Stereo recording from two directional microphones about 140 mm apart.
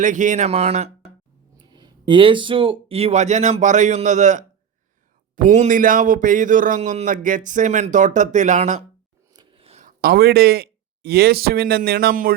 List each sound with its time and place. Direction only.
0.0 s speech: 65° right (ahead or behind)
1.5 s speech: 30° right (ahead or behind); by 4.4 s 60° right (ahead or behind)
5.4 s a man's voice: 70° right (ahead or behind)
9.3 s a sound: 35° right (ahead or behind)
9.8 s a man's voice: 90° right